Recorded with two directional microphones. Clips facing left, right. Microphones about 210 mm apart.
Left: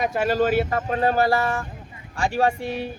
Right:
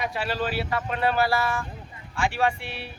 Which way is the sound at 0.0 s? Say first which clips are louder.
Left 7 dB; 45° left (ahead or behind).